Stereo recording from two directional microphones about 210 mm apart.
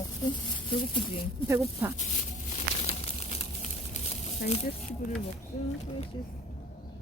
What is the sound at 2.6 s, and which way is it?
Crumpling, 30° left (ahead or behind).